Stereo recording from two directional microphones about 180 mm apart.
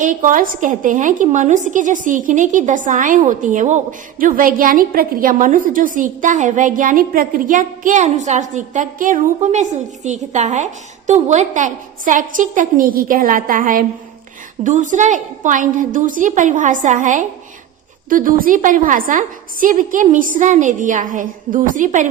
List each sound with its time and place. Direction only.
0.0 s a woman's voice: 50° right (ahead or behind)